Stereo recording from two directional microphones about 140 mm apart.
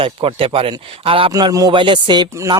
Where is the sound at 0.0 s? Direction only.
40° right (ahead or behind).